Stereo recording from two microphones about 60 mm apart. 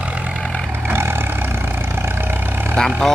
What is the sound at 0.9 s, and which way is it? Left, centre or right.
Vehicle, right.